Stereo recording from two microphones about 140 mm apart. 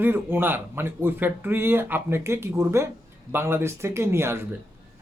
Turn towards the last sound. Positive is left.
turn(degrees=-20)  # may be behind; listen again after turning